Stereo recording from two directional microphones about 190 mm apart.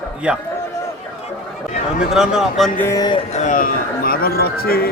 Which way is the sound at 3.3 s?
40° left (ahead or behind).